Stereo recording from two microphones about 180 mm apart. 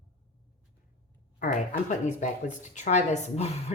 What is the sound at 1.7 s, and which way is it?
Speech, 40° left (ahead or behind).